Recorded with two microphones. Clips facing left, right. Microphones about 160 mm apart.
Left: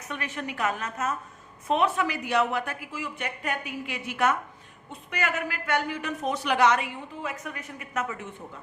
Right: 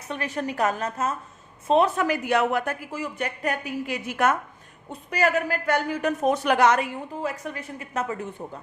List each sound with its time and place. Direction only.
0.1 s a man's voice: 35° right (ahead or behind)